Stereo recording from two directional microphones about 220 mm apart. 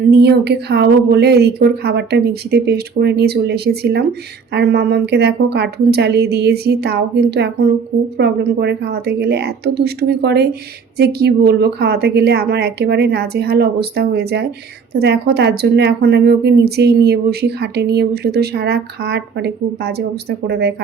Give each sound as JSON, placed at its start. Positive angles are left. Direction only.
{"t": 0.1, "sound": "a woman's voice", "side_deg": -45}